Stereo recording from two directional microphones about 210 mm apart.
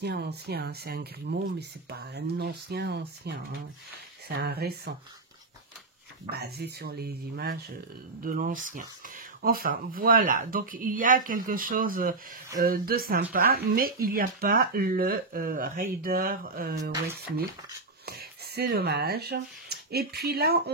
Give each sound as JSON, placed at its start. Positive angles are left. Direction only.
{"t": 0.0, "sound": "speech", "side_deg": -50}
{"t": 6.3, "sound": "speech", "side_deg": -50}
{"t": 18.0, "sound": "speech", "side_deg": -50}